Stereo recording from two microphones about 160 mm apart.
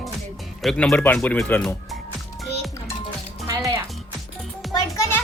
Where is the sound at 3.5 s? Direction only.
20° right (ahead or behind).